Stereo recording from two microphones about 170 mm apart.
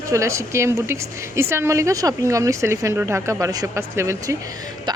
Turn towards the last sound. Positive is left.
turn(degrees=-15)  # may be behind; listen again after turning